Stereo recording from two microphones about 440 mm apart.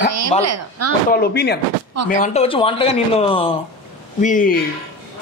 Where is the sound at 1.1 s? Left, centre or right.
Left.